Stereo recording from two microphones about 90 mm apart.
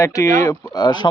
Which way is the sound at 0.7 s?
55° left (ahead or behind).